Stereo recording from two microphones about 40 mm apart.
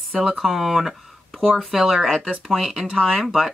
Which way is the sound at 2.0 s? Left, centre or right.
Centre.